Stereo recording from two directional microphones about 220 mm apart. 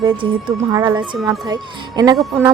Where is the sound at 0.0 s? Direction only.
20° right (ahead or behind).